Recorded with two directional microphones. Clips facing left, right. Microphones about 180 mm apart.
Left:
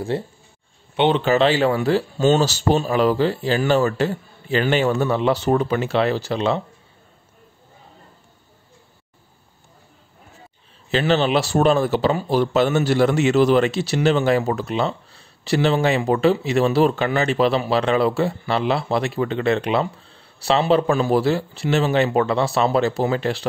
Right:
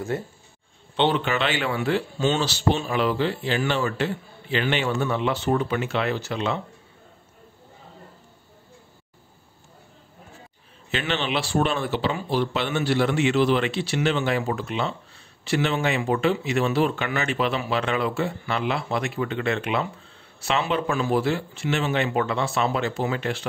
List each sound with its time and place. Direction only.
0.1 s speech: 30° left (ahead or behind)
10.9 s speech: 35° left (ahead or behind)